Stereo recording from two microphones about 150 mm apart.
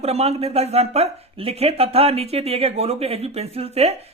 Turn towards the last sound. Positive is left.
turn(degrees=-45)  # may be behind; listen again after turning